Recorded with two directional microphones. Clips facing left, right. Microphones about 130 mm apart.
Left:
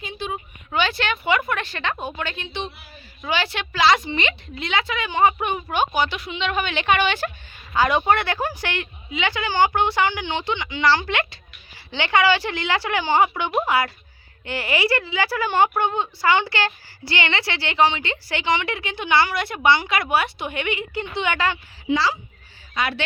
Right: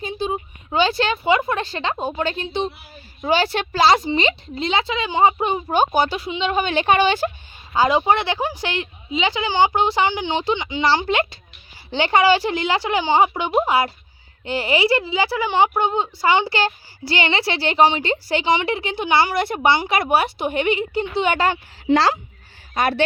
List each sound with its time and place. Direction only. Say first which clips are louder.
0.0 s a woman's voice: right 5 dB; 35° right (ahead or behind)
5.8 s a woman's voice: right 2 dB; 40° right (ahead or behind)
15.3 s a woman's voice: even; 15° right (ahead or behind); by 21.6 s 35° right (ahead or behind)
21.8 s a child's voice: right 5 dB; 80° right
22.7 s speech: right 6 dB; 45° right (ahead or behind)